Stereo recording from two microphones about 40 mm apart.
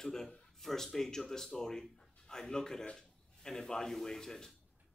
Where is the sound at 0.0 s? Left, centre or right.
Centre.